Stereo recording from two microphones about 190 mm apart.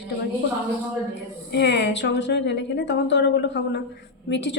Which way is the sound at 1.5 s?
65° left (ahead or behind).